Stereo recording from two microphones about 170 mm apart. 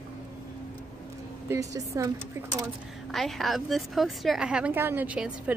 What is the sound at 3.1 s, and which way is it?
A woman's voice, centre (ahead or behind).